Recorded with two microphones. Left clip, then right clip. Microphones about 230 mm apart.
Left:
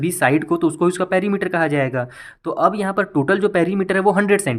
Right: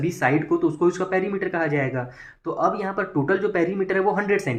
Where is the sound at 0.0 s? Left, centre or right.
Left.